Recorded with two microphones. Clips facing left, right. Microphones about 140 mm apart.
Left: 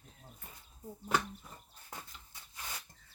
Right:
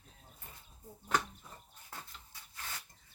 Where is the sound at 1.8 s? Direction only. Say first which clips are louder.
Left 1 dB; 15° left (ahead or behind).